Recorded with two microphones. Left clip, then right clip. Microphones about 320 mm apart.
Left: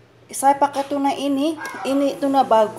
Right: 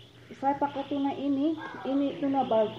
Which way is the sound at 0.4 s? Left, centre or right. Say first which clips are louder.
Left 12 dB; centre.